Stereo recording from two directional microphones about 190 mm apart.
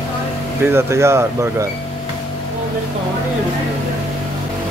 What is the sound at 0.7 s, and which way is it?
Speech, 15° right (ahead or behind).